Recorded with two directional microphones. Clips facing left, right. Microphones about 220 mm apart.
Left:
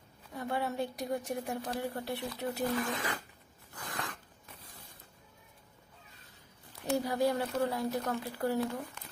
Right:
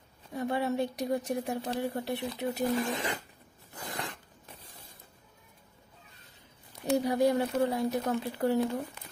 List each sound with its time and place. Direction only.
0.3 s speech: 20° right (ahead or behind)
3.7 s a sound: 25° right (ahead or behind)
7.1 s speech: 20° right (ahead or behind)